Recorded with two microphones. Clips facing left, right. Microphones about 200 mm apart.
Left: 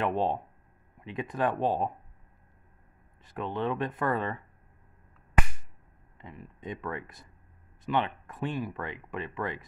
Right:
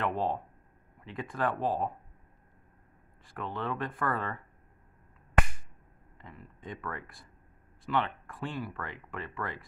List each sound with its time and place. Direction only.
0.0 s speech: 20° left (ahead or behind)
3.3 s speech: 20° left (ahead or behind)
6.2 s speech: 20° left (ahead or behind)